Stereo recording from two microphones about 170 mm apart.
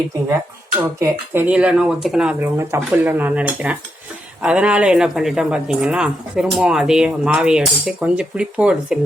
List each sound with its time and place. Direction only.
0.9 s speech: 15° right (ahead or behind)